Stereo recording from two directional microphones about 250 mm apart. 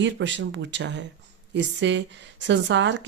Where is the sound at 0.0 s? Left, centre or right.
Right.